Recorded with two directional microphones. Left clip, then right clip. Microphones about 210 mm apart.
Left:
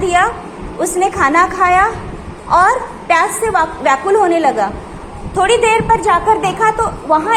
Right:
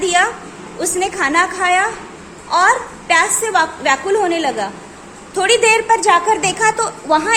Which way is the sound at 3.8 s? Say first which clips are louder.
Left 3 dB; 30° right (ahead or behind).